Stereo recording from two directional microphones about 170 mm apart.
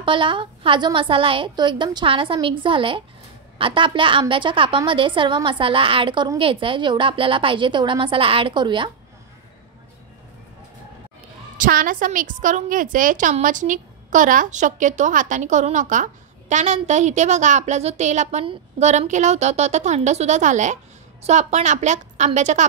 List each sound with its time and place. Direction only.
0.0 s a woman's voice: 30° right (ahead or behind)
11.5 s a woman's voice: 50° right (ahead or behind)